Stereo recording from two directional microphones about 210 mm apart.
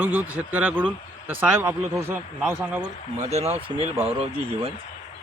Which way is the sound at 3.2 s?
30° right (ahead or behind).